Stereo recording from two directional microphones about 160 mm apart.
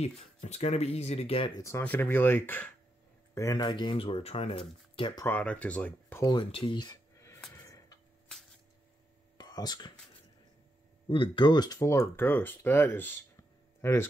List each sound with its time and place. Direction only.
0.0 s speech: 45° left (ahead or behind)
1.6 s speech: 15° left (ahead or behind); by 5.2 s 30° left (ahead or behind)
5.2 s speech: 10° left (ahead or behind)
6.2 s speech: 30° left (ahead or behind)
7.5 s tick-tock: 20° left (ahead or behind)
9.4 s speech: 25° left (ahead or behind)
11.1 s speech: 30° left (ahead or behind)